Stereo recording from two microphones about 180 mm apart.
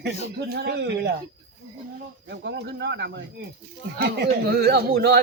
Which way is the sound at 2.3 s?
75° right (ahead or behind).